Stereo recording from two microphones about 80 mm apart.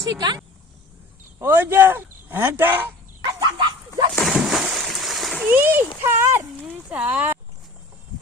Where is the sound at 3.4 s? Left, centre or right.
Right.